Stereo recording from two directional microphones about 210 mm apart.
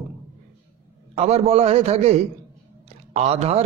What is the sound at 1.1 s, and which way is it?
A man's voice, 30° right (ahead or behind).